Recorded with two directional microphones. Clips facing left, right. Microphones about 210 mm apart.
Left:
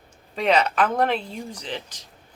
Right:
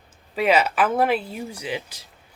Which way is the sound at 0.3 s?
5° right (ahead or behind).